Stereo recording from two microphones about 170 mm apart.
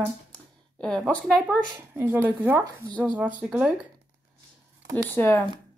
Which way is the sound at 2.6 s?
25° right (ahead or behind).